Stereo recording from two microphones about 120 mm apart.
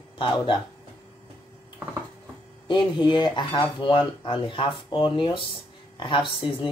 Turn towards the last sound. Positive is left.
turn(degrees=45)  # may be behind; listen again after turning